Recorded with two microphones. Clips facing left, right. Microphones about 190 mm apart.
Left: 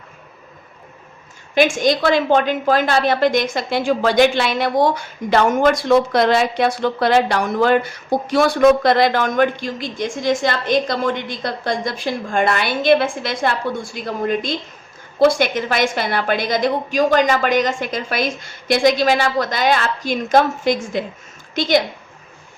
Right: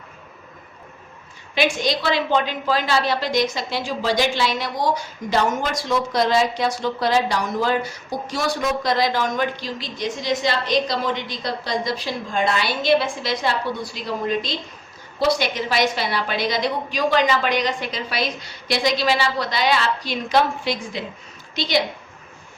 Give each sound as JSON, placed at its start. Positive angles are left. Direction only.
{"t": 1.5, "sound": "a woman's voice", "side_deg": 50}